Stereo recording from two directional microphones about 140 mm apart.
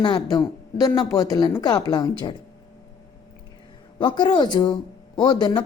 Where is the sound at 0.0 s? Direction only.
30° left (ahead or behind).